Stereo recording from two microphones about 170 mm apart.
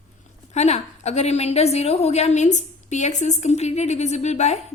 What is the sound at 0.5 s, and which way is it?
A woman's voice, 40° left (ahead or behind).